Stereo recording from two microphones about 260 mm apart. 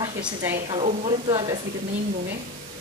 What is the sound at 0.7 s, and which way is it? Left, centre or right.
Speech, right.